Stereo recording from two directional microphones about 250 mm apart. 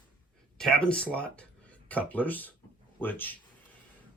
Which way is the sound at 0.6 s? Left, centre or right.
Centre.